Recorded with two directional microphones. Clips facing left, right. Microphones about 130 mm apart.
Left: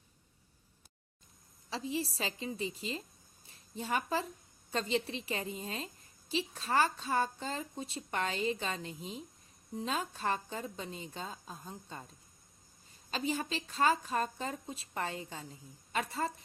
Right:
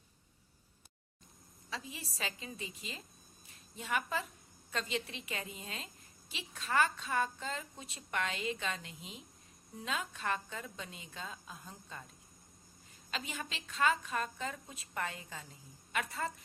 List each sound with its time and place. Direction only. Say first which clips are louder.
1.7 s a woman's voice: left 9 dB; 30° left (ahead or behind)
13.1 s a woman's voice: left 7 dB; 30° left (ahead or behind)